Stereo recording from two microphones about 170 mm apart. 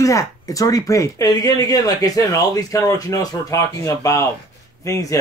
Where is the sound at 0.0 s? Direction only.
20° left (ahead or behind).